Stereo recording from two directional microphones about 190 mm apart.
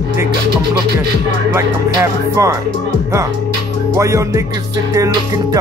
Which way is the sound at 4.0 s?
15° right (ahead or behind).